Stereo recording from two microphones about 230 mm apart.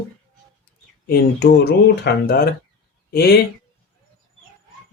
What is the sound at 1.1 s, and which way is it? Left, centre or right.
Speech, left.